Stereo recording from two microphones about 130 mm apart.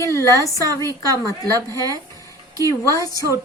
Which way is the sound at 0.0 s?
20° left (ahead or behind).